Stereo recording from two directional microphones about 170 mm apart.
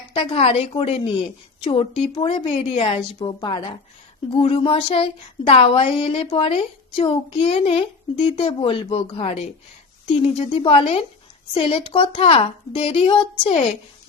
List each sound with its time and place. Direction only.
0.2 s a woman's voice: 35° left (ahead or behind)